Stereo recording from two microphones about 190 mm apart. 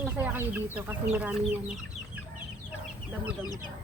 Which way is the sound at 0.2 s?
10° right (ahead or behind).